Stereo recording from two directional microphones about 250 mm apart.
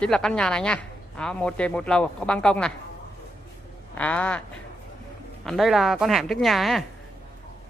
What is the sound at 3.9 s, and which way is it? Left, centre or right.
Speech, centre.